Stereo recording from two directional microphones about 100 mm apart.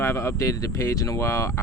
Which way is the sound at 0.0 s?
30° left (ahead or behind).